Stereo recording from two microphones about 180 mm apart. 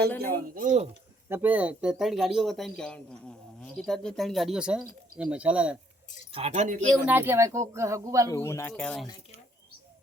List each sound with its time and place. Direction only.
0.3 s speech: 50° right (ahead or behind)
1.3 s speech: 10° right (ahead or behind)
6.3 s speech: 35° right (ahead or behind)
7.0 s speech: 10° right (ahead or behind)
8.3 s speech: 15° left (ahead or behind)